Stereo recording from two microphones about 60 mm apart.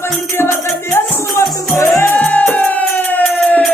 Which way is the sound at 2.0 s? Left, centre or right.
Left.